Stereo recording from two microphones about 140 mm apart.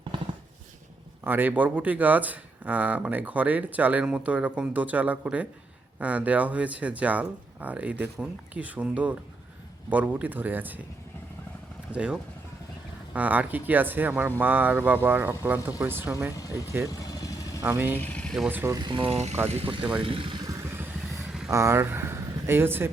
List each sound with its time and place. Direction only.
0.1 s a sound: 35° right (ahead or behind)
1.2 s speech: 15° right (ahead or behind)
11.9 s speech: 5° right (ahead or behind)
16.3 s speech: 25° left (ahead or behind)
17.0 s vehicle: 25° left (ahead or behind)
17.6 s speech: 15° right (ahead or behind)
17.9 s speech: 10° left (ahead or behind)
18.4 s speech: 15° right (ahead or behind)
18.8 s speech: 35° right (ahead or behind)
20.5 s vehicle: 20° right (ahead or behind)
21.5 s speech: 20° right (ahead or behind)